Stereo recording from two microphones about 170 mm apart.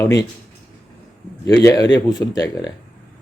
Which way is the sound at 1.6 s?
25° left (ahead or behind).